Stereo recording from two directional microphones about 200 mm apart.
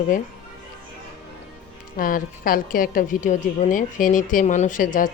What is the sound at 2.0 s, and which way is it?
A woman's voice, 45° left (ahead or behind).